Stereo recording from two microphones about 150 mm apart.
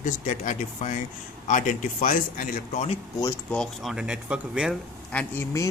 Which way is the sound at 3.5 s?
Centre (ahead or behind).